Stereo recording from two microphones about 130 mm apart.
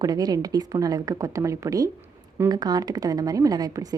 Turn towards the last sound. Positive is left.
turn(degrees=-30)  # may be behind; listen again after turning